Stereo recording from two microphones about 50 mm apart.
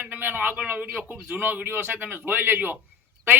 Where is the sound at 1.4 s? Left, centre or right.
Right.